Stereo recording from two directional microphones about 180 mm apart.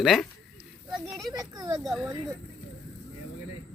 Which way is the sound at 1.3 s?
20° right (ahead or behind).